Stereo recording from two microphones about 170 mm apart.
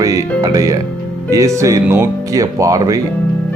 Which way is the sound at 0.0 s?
20° right (ahead or behind).